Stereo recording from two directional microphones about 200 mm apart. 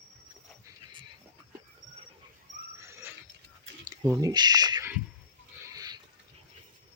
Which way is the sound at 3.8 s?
15° right (ahead or behind).